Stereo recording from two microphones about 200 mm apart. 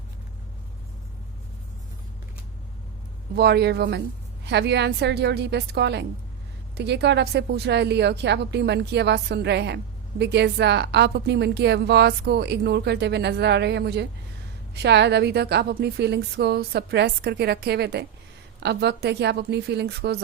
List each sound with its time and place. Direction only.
3.3 s a woman's voice: 55° right (ahead or behind)